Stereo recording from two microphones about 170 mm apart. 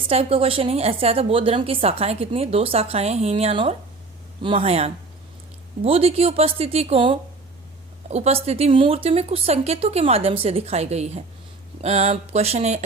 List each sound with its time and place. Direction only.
0.1 s a woman's voice: 35° right (ahead or behind)